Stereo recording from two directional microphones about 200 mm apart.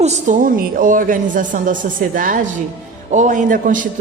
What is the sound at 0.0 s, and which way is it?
A man's voice, 40° right (ahead or behind).